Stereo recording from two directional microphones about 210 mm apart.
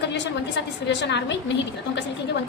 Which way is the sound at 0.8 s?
55° left (ahead or behind).